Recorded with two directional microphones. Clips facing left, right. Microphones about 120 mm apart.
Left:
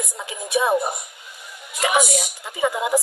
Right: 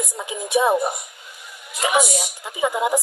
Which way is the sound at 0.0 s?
15° right (ahead or behind).